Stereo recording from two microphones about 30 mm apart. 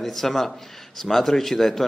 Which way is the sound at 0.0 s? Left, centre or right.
Centre.